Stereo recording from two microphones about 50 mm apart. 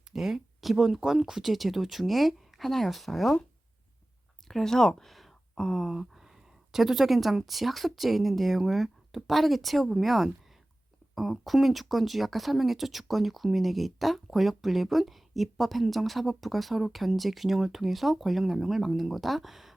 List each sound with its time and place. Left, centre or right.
0.1 s speech: centre
4.4 s speech: centre
5.5 s a sound: centre
5.8 s speech: centre